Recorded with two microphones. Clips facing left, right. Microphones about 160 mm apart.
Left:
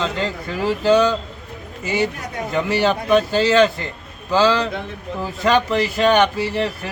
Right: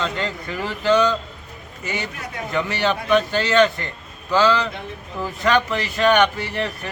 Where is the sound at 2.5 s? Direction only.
5° left (ahead or behind).